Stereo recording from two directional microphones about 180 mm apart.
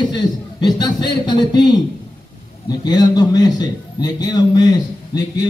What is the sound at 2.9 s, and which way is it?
A man's voice, 20° left (ahead or behind).